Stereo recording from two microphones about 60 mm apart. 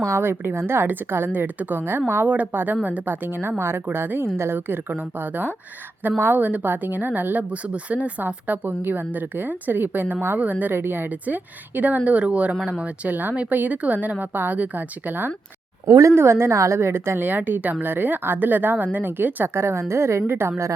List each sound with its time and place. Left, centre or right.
0.1 s a woman's voice: right
2.2 s a woman's voice: right
8.4 s a woman's voice: right
15.9 s speech: right
16.1 s a woman's voice: right
17.2 s a woman's voice: right
19.5 s a woman's voice: right